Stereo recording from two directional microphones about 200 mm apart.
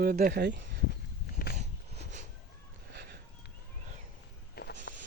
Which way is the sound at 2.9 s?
55° right (ahead or behind).